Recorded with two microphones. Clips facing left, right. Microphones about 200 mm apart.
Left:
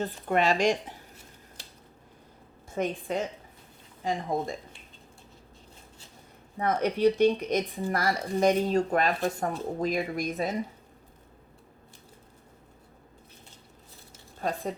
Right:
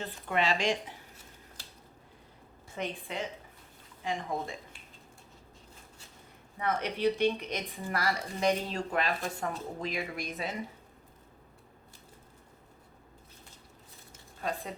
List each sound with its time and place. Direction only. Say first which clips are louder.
0.0 s speech: left 5 dB; 45° left (ahead or behind)
2.6 s a woman's voice: left 7 dB; 45° left (ahead or behind)
6.6 s speech: left 6 dB; 40° left (ahead or behind)